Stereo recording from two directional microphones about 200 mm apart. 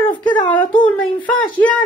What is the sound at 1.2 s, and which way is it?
Speech, 25° left (ahead or behind).